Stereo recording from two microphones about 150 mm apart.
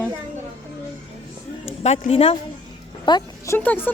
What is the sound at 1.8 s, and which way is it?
Speech, 45° left (ahead or behind).